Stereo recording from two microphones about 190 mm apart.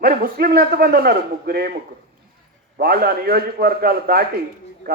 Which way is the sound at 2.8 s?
55° right (ahead or behind).